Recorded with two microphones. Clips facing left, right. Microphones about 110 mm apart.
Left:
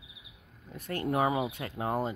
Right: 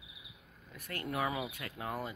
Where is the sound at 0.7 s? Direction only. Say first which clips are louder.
Left 8 dB; 25° left (ahead or behind).